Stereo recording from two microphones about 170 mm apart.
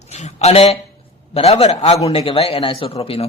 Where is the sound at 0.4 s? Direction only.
40° left (ahead or behind).